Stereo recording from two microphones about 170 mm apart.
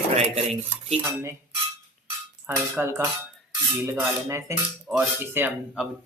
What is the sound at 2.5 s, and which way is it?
Cutlery, 15° right (ahead or behind).